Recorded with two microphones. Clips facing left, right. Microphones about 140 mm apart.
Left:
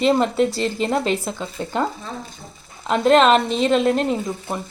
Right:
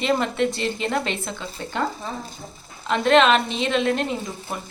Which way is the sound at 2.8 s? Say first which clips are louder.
Left 3 dB; 40° left (ahead or behind).